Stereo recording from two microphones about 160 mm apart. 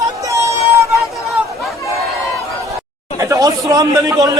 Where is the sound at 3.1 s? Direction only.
20° right (ahead or behind).